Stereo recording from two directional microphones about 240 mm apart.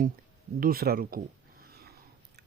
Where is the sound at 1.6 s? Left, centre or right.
Right.